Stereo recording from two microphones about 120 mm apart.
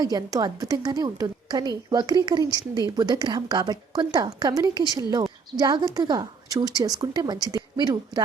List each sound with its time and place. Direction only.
0.0 s a woman's voice: 35° right (ahead or behind)